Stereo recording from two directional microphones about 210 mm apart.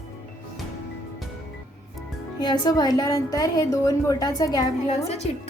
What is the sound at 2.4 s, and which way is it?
A woman's voice, 20° left (ahead or behind).